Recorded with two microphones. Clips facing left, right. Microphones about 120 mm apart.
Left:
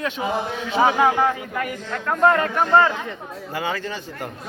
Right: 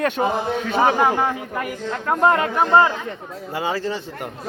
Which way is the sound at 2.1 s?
15° right (ahead or behind).